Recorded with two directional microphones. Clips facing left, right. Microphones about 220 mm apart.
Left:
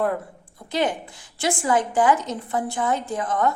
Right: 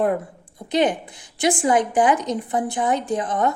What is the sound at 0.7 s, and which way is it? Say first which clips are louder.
A woman's voice: right 4 dB; 20° right (ahead or behind).